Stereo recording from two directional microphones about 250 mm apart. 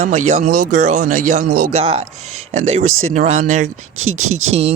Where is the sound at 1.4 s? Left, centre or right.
Right.